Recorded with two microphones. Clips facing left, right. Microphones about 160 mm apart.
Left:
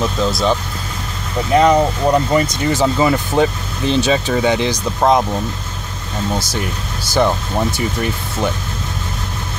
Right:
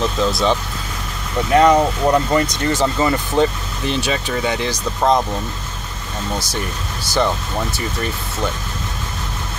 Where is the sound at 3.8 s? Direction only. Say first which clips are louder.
Left 5 dB; 20° left (ahead or behind).